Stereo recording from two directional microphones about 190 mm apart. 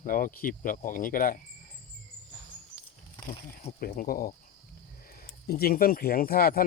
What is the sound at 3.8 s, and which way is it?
Speech, 50° left (ahead or behind).